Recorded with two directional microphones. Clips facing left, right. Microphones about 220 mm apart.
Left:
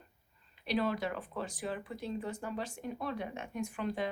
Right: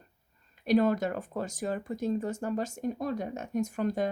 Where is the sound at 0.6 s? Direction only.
45° right (ahead or behind).